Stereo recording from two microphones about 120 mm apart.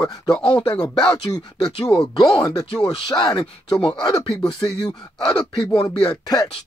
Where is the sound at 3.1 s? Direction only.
35° left (ahead or behind).